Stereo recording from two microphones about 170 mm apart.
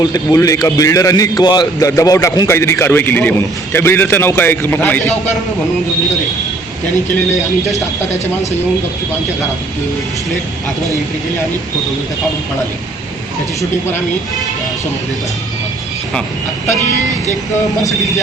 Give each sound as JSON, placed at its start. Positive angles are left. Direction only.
{"t": 0.0, "sound": "a man's voice", "side_deg": 20}